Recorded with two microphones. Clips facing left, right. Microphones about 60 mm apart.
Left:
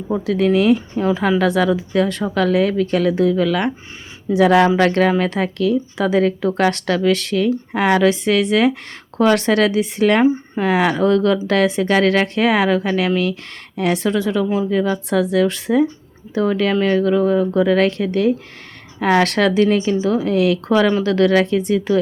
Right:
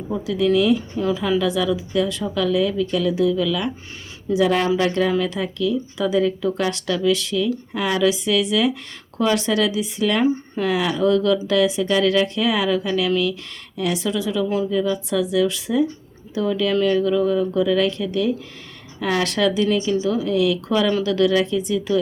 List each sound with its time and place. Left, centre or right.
0.3 s speech: left
1.0 s speech: left
10.2 s speech: left
10.7 s speech: left
19.6 s speech: left